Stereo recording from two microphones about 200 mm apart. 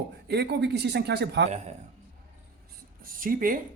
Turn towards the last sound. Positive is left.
turn(degrees=-45)  # may be behind; listen again after turning